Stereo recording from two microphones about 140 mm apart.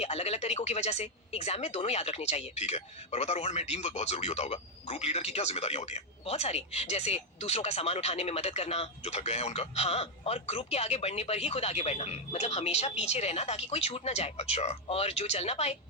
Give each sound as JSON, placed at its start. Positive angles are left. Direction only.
{"t": 0.0, "sound": "speech", "side_deg": 50}